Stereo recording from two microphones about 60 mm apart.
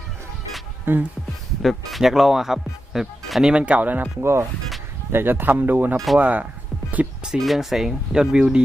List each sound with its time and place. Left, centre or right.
0.9 s speech: right
1.6 s speech: centre
3.4 s speech: centre
4.2 s speech: right
5.1 s speech: right
7.3 s speech: centre